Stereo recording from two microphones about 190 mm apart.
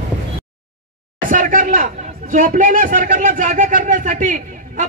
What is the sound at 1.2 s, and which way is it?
A child's voice, 45° right (ahead or behind).